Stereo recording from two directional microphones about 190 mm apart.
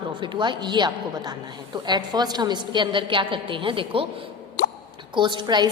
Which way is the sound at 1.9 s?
20° right (ahead or behind).